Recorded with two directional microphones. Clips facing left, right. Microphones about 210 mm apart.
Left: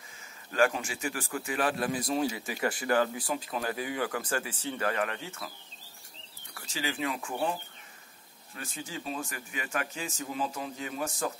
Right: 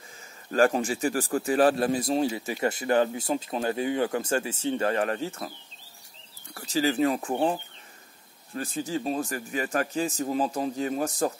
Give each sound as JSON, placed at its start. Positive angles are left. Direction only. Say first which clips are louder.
{"t": 0.5, "sound": "speech", "louder": "right 5 dB", "side_deg": -40}
{"t": 6.5, "sound": "a man's voice", "louder": "right 10 dB", "side_deg": -40}
{"t": 8.5, "sound": "a man's voice", "louder": "right 10 dB", "side_deg": -40}